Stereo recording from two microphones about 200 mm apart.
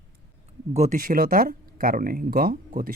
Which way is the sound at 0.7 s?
40° right (ahead or behind).